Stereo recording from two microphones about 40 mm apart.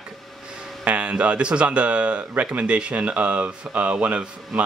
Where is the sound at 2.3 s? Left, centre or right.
Right.